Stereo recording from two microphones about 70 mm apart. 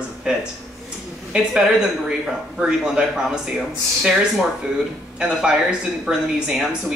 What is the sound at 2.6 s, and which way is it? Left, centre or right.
Speech, centre.